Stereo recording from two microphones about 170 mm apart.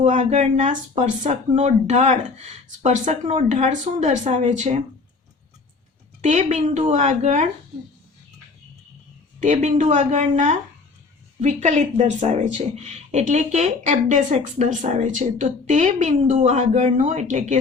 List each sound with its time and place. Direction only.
0.0 s speech: 45° right (ahead or behind)
6.2 s speech: 45° right (ahead or behind)
9.4 s speech: 45° right (ahead or behind)